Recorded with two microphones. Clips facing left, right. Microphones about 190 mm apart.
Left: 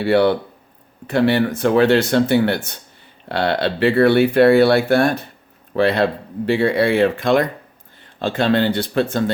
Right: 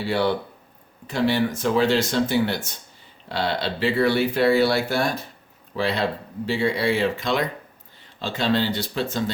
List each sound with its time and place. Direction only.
0.0 s speech: 60° left (ahead or behind)